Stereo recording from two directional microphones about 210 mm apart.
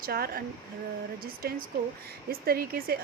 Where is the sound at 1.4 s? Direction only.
45° right (ahead or behind).